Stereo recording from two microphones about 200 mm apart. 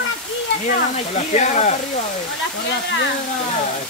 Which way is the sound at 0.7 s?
35° left (ahead or behind).